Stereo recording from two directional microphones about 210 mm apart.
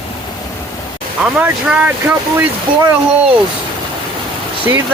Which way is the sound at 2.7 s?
25° right (ahead or behind).